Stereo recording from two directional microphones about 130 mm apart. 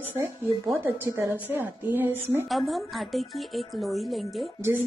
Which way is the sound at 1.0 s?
20° right (ahead or behind).